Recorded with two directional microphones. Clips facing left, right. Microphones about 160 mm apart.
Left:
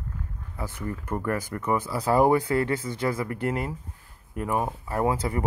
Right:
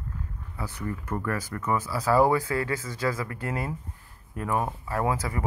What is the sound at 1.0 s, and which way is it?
Speech, 20° left (ahead or behind).